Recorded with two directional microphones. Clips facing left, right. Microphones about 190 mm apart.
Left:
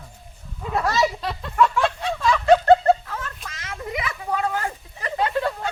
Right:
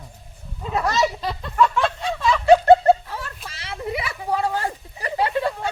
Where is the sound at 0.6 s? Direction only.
Centre (ahead or behind).